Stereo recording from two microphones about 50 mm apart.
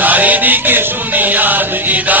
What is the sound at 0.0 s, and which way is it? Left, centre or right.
Music, right.